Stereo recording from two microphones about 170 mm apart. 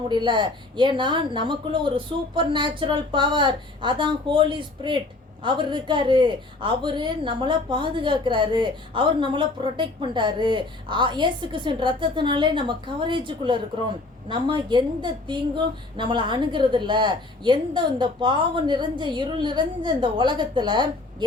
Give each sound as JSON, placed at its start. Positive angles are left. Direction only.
{"t": 0.1, "sound": "a woman's voice", "side_deg": -30}